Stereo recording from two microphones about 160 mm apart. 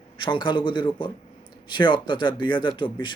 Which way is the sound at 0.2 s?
30° left (ahead or behind).